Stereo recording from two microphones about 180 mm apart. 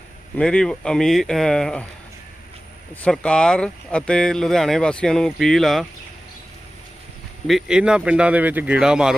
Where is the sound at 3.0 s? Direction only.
5° left (ahead or behind).